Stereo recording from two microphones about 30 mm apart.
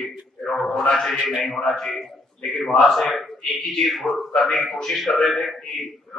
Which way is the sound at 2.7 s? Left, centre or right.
Centre.